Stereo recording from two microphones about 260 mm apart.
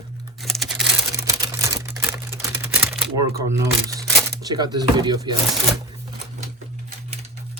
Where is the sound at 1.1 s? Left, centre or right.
Centre.